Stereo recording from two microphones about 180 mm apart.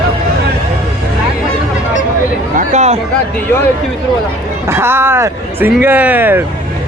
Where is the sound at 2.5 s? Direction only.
40° right (ahead or behind).